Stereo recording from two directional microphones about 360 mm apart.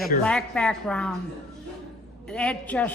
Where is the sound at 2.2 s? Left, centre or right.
Centre.